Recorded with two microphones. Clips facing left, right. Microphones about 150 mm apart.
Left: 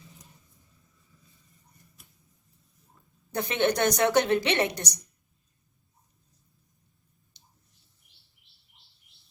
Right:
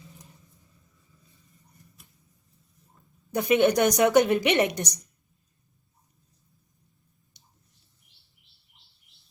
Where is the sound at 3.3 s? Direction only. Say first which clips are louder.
Right 5 dB; 15° right (ahead or behind).